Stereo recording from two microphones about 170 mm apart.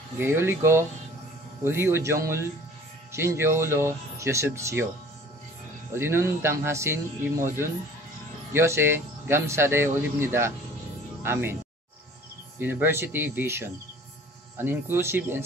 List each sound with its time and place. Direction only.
0.2 s a man's voice: 15° right (ahead or behind)
5.9 s a man's voice: 15° right (ahead or behind)
12.5 s a man's voice: 10° right (ahead or behind)